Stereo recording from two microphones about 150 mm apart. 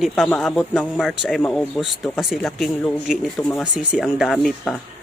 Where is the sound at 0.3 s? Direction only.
Centre (ahead or behind).